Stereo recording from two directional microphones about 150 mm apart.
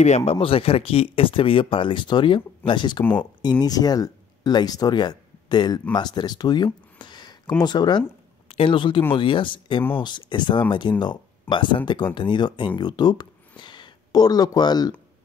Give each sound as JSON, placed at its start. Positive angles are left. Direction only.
{"t": 0.0, "sound": "speech", "side_deg": 45}
{"t": 3.0, "sound": "speech", "side_deg": 10}
{"t": 3.4, "sound": "speech", "side_deg": 25}